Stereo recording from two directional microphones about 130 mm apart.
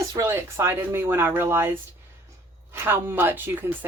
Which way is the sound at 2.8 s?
15° right (ahead or behind).